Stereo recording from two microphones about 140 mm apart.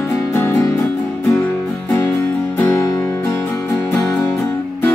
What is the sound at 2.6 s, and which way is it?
Music, 20° left (ahead or behind).